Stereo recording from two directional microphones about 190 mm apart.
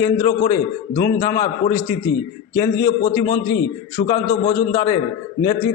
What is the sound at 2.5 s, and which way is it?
A man's voice, 15° left (ahead or behind).